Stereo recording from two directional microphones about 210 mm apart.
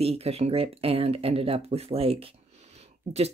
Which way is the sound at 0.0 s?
30° right (ahead or behind).